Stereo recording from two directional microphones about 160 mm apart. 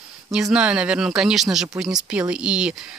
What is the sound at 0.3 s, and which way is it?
Speech, 5° right (ahead or behind).